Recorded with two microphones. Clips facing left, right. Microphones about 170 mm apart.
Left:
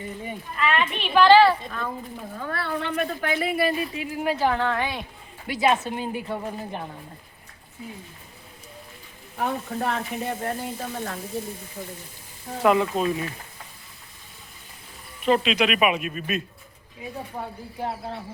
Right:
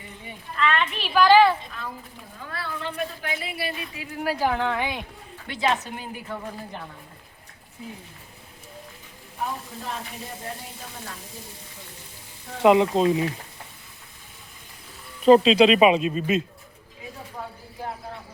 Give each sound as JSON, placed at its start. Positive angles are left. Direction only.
{"t": 0.5, "sound": "a sound", "side_deg": 10}
{"t": 0.9, "sound": "a woman's voice", "side_deg": -5}
{"t": 1.8, "sound": "speech", "side_deg": 55}
{"t": 4.3, "sound": "a woman's voice", "side_deg": -10}
{"t": 5.6, "sound": "a woman's voice", "side_deg": 20}
{"t": 9.4, "sound": "frying", "side_deg": 70}
{"t": 12.6, "sound": "speech", "side_deg": -20}
{"t": 15.2, "sound": "speech", "side_deg": -30}
{"t": 17.4, "sound": "speech", "side_deg": 30}